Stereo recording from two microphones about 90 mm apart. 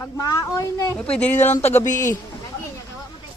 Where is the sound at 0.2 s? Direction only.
40° left (ahead or behind).